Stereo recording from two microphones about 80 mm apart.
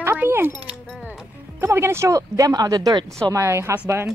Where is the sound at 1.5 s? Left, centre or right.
Right.